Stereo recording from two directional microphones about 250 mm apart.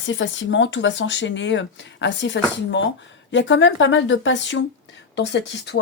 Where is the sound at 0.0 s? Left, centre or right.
Left.